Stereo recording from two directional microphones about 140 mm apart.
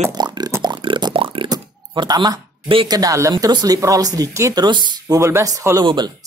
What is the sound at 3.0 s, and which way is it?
Speech, 20° right (ahead or behind).